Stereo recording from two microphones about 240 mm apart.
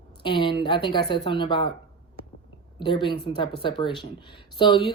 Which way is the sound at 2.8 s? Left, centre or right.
Centre.